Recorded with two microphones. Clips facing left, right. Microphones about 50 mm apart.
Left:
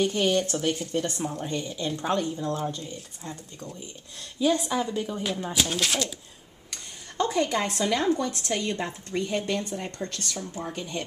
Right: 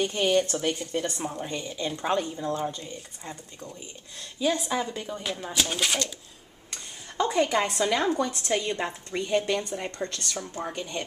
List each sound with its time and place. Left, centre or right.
0.0 s a woman's voice: centre
6.7 s a woman's voice: centre
10.0 s speech: right
10.7 s a woman's voice: centre